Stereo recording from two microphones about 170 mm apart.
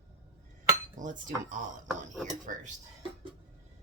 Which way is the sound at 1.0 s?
50° right (ahead or behind).